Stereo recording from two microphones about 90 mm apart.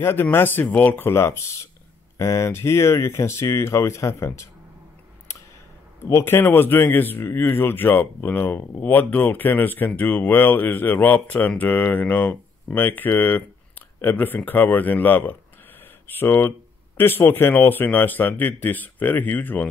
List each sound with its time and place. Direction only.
0.0 s speech: 25° left (ahead or behind)
6.0 s speech: 30° left (ahead or behind)